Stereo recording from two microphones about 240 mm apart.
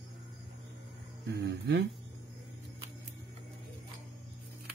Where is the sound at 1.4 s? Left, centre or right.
Right.